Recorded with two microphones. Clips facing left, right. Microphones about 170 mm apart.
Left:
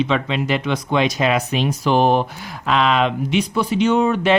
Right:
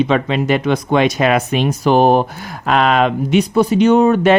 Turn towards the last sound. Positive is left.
turn(degrees=-45)  # may be behind; listen again after turning